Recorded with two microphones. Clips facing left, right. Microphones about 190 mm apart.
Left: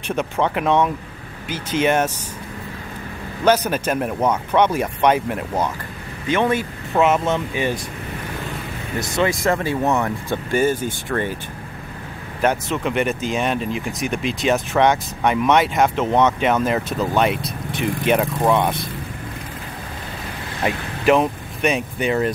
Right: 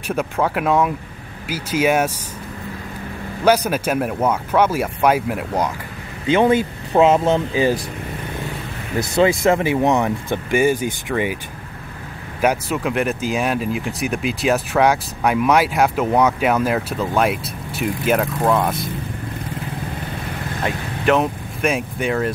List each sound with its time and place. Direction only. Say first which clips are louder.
0.1 s speech: right 1 dB; 5° right (ahead or behind)
3.4 s speech: right 1 dB; 10° right (ahead or behind)
6.2 s speech: right 4 dB; 30° right (ahead or behind)
9.1 s speech: right 4 dB; 30° right (ahead or behind)
12.4 s speech: right 1 dB; 10° right (ahead or behind)
20.6 s speech: left 2 dB; 5° left (ahead or behind)